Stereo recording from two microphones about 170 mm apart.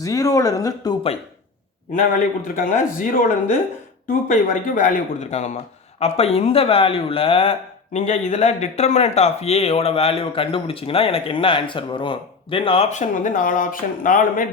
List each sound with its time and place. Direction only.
0.0 s speech: 20° left (ahead or behind)
1.9 s a man's voice: 55° left (ahead or behind)
4.3 s a man's voice: 55° left (ahead or behind)